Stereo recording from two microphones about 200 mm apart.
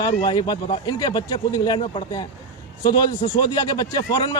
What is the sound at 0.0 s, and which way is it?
A man's voice, 20° left (ahead or behind).